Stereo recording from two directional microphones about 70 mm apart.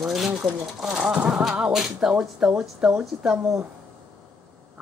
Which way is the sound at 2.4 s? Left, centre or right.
Centre.